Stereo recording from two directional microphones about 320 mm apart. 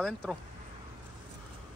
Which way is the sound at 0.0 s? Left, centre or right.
Centre.